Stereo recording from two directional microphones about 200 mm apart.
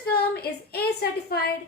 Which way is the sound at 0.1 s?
50° left (ahead or behind).